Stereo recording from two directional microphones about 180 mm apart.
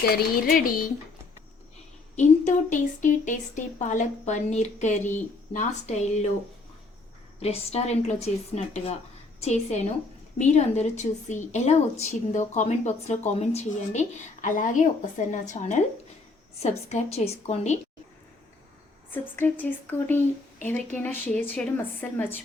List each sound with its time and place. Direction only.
0.0 s speech: 55° left (ahead or behind)
2.1 s a woman's voice: 45° left (ahead or behind)
7.3 s a woman's voice: 35° left (ahead or behind)
19.1 s speech: 10° left (ahead or behind)